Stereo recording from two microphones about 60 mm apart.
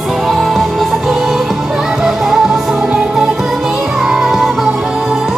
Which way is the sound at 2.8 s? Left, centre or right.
Centre.